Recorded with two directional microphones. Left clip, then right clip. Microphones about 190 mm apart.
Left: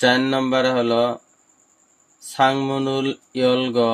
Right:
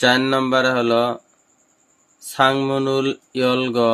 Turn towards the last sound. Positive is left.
turn(degrees=-25)  # may be behind; listen again after turning